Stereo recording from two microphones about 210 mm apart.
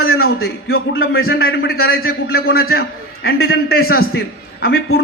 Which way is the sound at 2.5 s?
75° left (ahead or behind).